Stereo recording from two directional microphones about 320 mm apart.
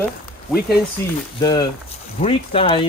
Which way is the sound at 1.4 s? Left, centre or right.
Centre.